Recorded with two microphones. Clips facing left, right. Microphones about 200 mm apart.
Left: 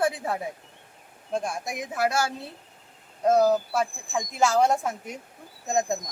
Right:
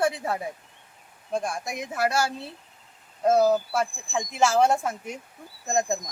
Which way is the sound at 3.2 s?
5° right (ahead or behind).